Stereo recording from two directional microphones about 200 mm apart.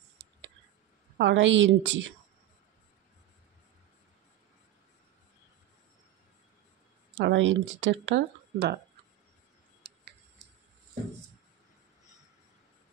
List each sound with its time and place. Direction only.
1.1 s speech: 65° right (ahead or behind)
7.2 s speech: 70° right (ahead or behind)
9.8 s tick: 55° right (ahead or behind)